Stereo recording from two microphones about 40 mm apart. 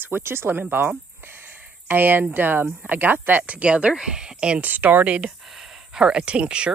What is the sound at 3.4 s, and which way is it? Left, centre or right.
A woman's voice, right.